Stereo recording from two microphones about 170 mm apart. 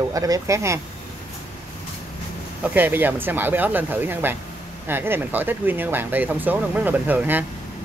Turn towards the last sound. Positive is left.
turn(degrees=-10)  # may be behind; listen again after turning